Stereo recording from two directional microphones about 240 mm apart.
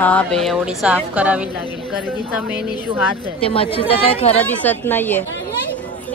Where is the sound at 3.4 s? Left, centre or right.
Left.